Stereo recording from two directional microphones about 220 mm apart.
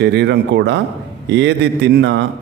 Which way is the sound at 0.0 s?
50° right (ahead or behind).